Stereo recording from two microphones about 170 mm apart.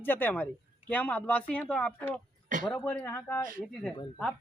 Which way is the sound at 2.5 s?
50° right (ahead or behind).